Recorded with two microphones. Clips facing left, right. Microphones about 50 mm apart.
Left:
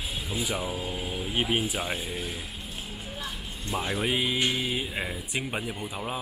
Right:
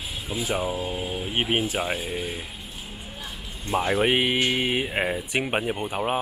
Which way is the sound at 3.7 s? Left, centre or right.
Right.